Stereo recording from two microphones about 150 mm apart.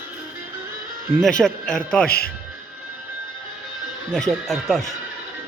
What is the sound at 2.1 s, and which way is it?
Speech, 90° left.